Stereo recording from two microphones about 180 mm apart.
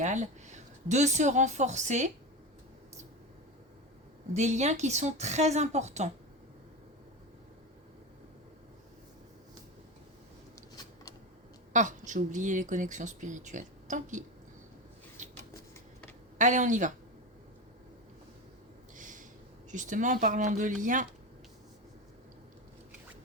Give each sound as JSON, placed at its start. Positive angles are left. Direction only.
{"t": 0.0, "sound": "speech", "side_deg": -40}
{"t": 4.4, "sound": "speech", "side_deg": -40}
{"t": 11.7, "sound": "speech", "side_deg": -45}
{"t": 16.4, "sound": "speech", "side_deg": -45}
{"t": 18.9, "sound": "a sound", "side_deg": -45}
{"t": 19.7, "sound": "speech", "side_deg": -45}